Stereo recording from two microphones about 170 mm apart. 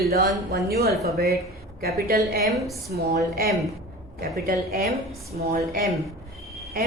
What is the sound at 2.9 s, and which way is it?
Speech, 65° right (ahead or behind).